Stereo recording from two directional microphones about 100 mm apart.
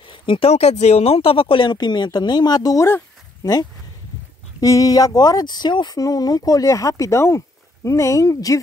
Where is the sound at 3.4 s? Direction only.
40° left (ahead or behind).